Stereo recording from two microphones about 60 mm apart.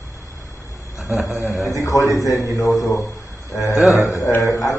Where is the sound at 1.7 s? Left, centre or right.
Left.